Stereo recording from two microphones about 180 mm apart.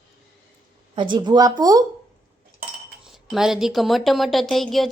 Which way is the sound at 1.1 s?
25° right (ahead or behind).